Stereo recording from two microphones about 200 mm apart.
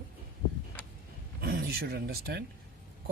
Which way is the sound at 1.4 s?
50° right (ahead or behind).